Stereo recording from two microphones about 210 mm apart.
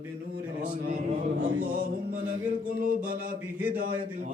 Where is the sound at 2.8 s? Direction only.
40° right (ahead or behind).